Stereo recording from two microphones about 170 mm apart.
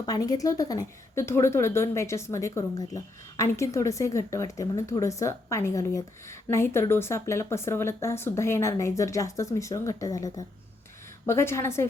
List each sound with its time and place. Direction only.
0.0 s a woman's voice: 20° left (ahead or behind)